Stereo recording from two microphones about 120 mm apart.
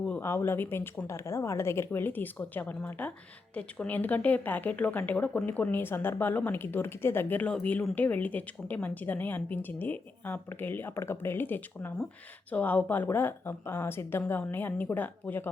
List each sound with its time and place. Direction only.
0.2 s a woman's voice: 20° left (ahead or behind)